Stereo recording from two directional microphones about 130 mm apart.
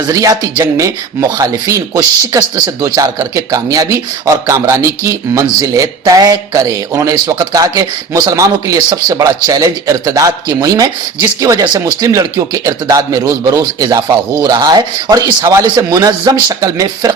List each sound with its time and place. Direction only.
0.1 s speech: 25° right (ahead or behind)